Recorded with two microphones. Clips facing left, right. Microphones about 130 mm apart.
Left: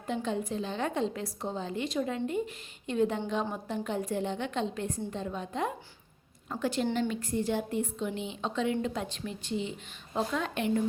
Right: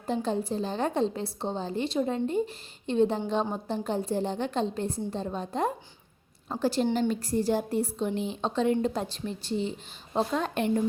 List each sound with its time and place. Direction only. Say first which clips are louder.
0.1 s a woman's voice: right 3 dB; 35° right (ahead or behind)